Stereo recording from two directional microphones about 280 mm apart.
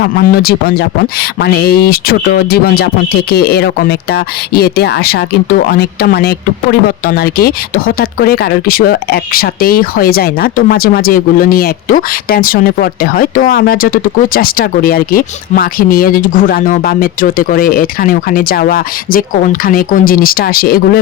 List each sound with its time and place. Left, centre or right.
0.0 s speech: left